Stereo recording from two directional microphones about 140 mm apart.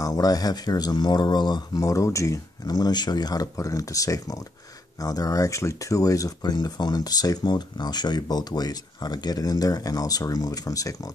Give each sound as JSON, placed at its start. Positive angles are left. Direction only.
{"t": 0.0, "sound": "speech", "side_deg": 25}